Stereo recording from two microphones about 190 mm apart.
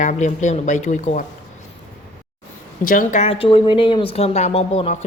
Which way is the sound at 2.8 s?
45° left (ahead or behind).